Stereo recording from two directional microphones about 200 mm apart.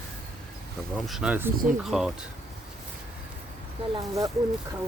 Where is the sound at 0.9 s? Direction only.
Centre (ahead or behind).